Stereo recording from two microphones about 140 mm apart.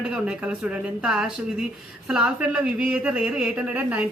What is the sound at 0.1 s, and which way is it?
Speech, 5° right (ahead or behind).